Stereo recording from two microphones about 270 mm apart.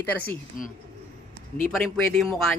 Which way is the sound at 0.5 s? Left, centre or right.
Left.